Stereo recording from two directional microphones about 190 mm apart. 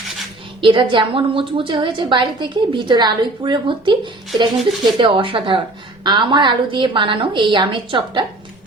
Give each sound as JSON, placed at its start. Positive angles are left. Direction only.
{"t": 0.6, "sound": "speech", "side_deg": -25}